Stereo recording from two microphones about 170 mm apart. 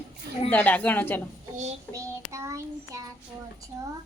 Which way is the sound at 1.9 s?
15° right (ahead or behind).